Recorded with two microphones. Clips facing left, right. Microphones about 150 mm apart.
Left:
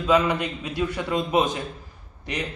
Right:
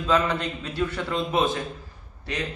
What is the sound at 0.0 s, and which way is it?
A man's voice, 10° left (ahead or behind).